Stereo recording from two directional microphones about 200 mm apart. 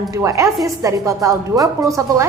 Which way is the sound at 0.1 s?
15° right (ahead or behind).